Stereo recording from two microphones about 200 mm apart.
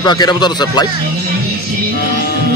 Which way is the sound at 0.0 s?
20° left (ahead or behind).